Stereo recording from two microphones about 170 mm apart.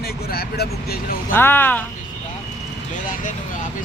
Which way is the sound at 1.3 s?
10° left (ahead or behind).